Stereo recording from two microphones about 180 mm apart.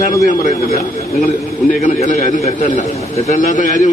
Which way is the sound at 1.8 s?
45° left (ahead or behind).